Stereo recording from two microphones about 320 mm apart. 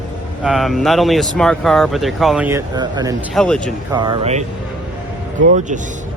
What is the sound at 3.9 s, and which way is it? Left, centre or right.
Speech, centre.